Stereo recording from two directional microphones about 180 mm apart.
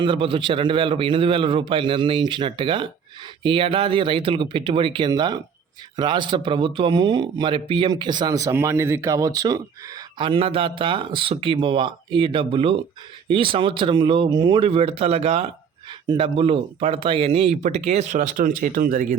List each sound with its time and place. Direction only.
0.0 s speech: 30° right (ahead or behind); by 19.0 s 50° right (ahead or behind)